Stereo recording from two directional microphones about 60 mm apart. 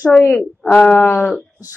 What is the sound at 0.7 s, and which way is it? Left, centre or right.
Speech, left.